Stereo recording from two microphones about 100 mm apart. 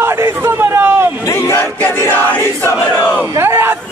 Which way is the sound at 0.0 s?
25° right (ahead or behind).